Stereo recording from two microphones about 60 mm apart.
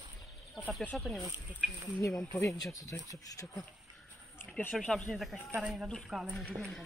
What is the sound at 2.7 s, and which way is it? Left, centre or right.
Speech, left.